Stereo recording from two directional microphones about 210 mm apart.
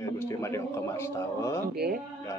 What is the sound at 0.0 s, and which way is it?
A man's voice, 15° left (ahead or behind).